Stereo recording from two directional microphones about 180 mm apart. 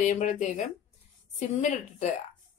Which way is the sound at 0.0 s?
40° left (ahead or behind).